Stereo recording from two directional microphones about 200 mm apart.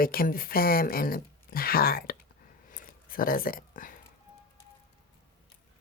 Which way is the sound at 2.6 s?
45° left (ahead or behind).